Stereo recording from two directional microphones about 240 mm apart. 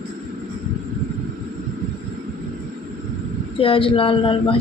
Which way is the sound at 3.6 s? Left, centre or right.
Left.